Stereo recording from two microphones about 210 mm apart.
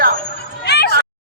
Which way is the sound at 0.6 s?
50° left (ahead or behind).